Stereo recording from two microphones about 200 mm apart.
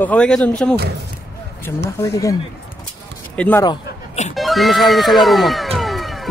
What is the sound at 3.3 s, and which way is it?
Speech, 5° left (ahead or behind).